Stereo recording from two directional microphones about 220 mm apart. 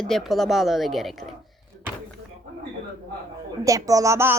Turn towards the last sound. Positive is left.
turn(degrees=-10)  # may be behind; listen again after turning